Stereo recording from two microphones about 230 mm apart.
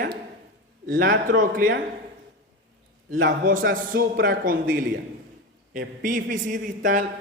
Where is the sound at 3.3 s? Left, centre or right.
Right.